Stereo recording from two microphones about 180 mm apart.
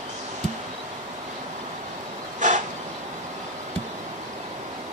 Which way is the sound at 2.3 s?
45° right (ahead or behind).